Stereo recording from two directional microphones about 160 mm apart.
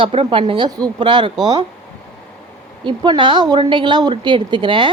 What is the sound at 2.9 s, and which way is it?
A woman's voice, 30° right (ahead or behind).